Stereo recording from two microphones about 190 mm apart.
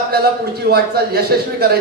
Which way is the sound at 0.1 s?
55° right (ahead or behind).